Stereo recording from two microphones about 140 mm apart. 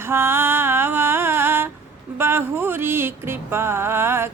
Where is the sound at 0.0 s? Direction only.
15° right (ahead or behind).